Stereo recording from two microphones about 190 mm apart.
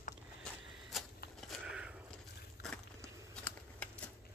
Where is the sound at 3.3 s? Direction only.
5° left (ahead or behind).